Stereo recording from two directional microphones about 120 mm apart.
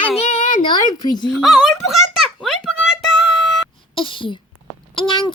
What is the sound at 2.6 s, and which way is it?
Child singing, centre (ahead or behind).